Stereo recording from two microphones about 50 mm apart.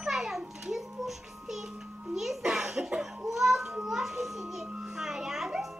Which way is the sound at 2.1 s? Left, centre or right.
Centre.